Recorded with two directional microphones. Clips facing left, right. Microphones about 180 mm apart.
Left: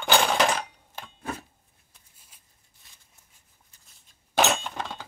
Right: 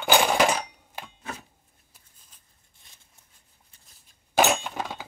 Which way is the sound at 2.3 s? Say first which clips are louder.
Even; 10° left (ahead or behind).